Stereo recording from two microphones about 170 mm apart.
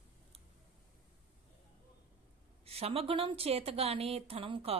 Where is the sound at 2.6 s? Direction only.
35° right (ahead or behind).